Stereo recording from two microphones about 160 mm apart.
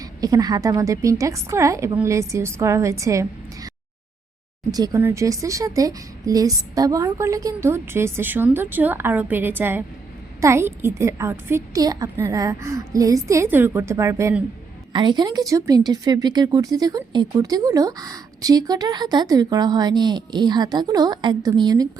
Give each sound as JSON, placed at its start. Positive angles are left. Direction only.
{"t": 0.0, "sound": "a woman's voice", "side_deg": -20}
{"t": 4.7, "sound": "speech", "side_deg": -20}
{"t": 14.9, "sound": "a woman's voice", "side_deg": -30}